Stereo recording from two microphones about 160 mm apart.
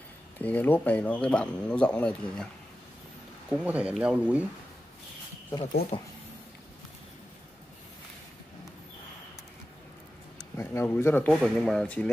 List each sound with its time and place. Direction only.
0.4 s speech: 10° left (ahead or behind)
3.4 s speech: 5° right (ahead or behind)
5.9 s speech: 35° left (ahead or behind)
10.5 s speech: 15° left (ahead or behind)
11.4 s speech: centre (ahead or behind)